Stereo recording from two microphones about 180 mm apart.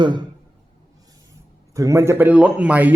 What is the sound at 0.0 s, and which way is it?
Speech, 25° right (ahead or behind).